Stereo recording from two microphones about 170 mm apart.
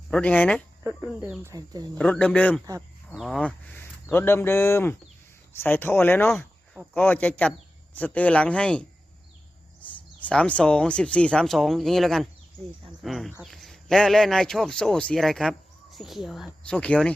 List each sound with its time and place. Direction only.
0.1 s speech: 10° left (ahead or behind)
1.2 s speech: 15° right (ahead or behind)
2.0 s a man's voice: 5° left (ahead or behind)